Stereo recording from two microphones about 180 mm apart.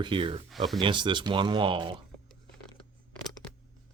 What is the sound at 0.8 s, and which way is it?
Speech, 25° right (ahead or behind).